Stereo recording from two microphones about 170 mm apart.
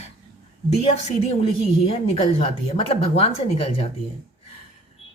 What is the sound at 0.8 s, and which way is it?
A woman's voice, 35° left (ahead or behind).